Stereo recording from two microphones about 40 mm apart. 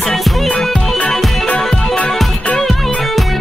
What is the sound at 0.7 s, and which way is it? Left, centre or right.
Music, centre.